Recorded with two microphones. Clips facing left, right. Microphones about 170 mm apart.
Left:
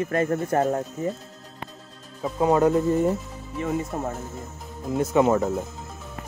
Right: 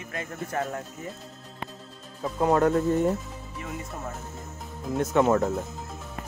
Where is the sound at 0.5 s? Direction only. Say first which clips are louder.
Left 6 dB; 35° left (ahead or behind).